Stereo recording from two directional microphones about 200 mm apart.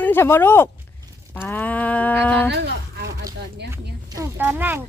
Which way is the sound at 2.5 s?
55° right (ahead or behind).